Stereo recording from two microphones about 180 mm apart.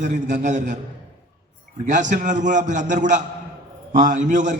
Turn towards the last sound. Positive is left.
turn(degrees=-45)  # may be behind; listen again after turning